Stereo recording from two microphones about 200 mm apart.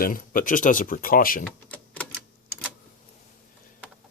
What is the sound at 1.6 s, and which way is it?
Typewriter, 5° left (ahead or behind).